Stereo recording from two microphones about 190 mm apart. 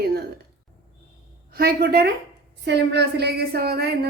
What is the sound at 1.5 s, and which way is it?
A woman's voice, 55° right (ahead or behind).